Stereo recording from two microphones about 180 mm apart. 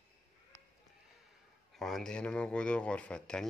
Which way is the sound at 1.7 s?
Centre (ahead or behind).